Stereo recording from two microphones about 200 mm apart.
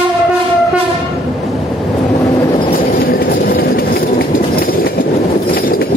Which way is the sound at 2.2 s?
25° left (ahead or behind).